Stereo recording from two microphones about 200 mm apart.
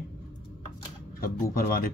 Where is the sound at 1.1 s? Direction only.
45° left (ahead or behind).